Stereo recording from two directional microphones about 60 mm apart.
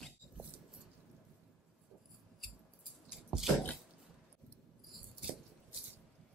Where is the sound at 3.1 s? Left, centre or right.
Centre.